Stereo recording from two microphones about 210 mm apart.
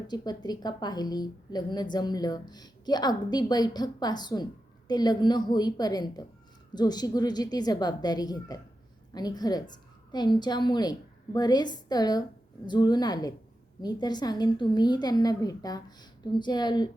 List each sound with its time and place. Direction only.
0.1 s a woman's voice: 20° left (ahead or behind)